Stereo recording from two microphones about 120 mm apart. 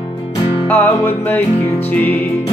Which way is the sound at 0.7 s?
15° left (ahead or behind).